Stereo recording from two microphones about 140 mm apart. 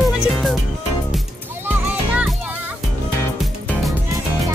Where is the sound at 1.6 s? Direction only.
10° right (ahead or behind).